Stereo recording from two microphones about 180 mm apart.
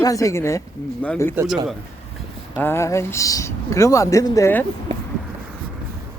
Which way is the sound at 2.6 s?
15° left (ahead or behind).